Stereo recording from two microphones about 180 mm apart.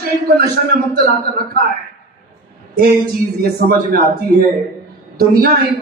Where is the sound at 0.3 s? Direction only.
65° right (ahead or behind).